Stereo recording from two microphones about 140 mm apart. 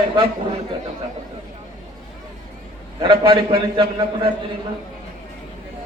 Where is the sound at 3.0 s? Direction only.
40° right (ahead or behind).